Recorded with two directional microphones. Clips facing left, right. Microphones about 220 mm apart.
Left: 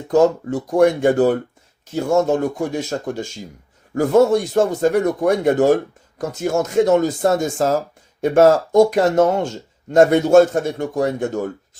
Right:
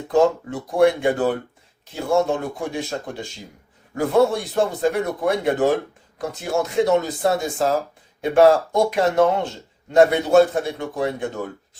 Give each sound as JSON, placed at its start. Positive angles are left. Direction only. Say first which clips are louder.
{"t": 0.1, "sound": "speech", "louder": "left 3 dB", "side_deg": 45}